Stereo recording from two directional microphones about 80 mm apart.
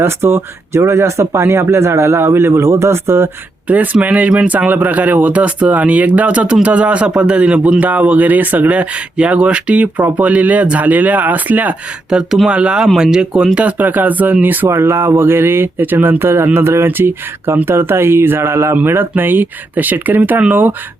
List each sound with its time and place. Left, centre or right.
0.0 s speech: right
3.9 s speech: centre